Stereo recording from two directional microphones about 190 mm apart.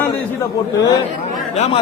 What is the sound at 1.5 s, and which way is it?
Speech, 35° left (ahead or behind).